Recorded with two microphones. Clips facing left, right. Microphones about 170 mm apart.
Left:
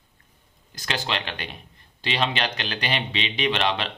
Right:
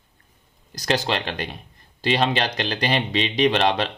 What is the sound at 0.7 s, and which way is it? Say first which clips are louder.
Speech: right 6 dB; 40° right (ahead or behind).